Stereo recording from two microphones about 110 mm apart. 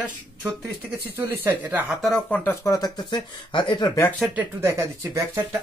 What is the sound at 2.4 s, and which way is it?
Speech, 30° left (ahead or behind).